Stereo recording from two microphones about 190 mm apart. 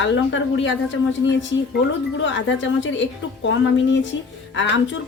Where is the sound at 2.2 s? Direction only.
75° left (ahead or behind).